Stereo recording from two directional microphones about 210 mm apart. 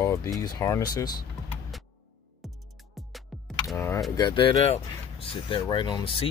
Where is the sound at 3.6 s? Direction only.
15° left (ahead or behind).